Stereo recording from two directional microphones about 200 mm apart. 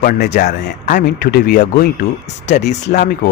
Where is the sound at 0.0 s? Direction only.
40° left (ahead or behind).